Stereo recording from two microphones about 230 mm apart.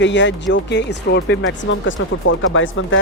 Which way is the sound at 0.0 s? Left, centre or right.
Left.